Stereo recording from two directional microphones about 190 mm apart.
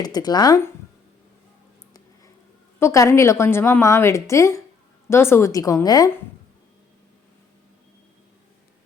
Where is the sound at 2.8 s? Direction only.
15° left (ahead or behind).